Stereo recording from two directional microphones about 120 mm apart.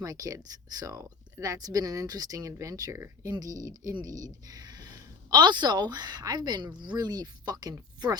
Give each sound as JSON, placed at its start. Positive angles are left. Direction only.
{"t": 0.0, "sound": "speech", "side_deg": -30}